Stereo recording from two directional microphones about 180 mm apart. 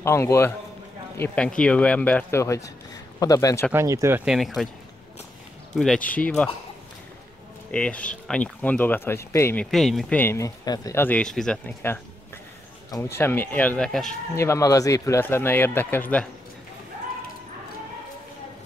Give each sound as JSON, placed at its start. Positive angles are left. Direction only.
{"t": 0.0, "sound": "a man's voice", "side_deg": 15}
{"t": 3.7, "sound": "speech", "side_deg": -15}
{"t": 5.8, "sound": "speech", "side_deg": 5}
{"t": 7.7, "sound": "speech", "side_deg": 5}
{"t": 9.7, "sound": "speech", "side_deg": 0}
{"t": 14.3, "sound": "speech", "side_deg": 15}